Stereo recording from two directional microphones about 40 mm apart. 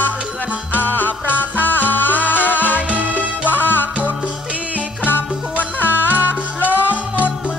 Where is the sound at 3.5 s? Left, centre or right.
Left.